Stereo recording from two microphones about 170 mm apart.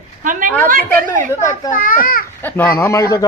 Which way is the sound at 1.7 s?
55° left (ahead or behind).